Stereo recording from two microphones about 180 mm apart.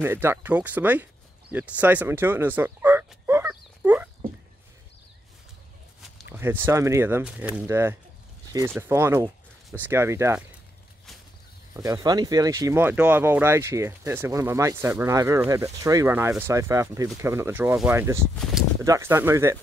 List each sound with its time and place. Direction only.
0.0 s speech: 15° right (ahead or behind)
1.5 s a sound: 10° right (ahead or behind)
6.2 s speech: 10° right (ahead or behind)
11.7 s speech: 20° right (ahead or behind)